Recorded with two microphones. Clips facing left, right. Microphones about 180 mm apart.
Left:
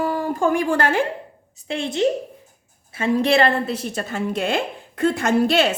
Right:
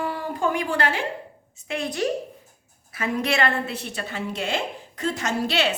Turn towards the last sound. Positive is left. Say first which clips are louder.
# left 6 dB
turn(degrees=50)  # may be behind; listen again after turning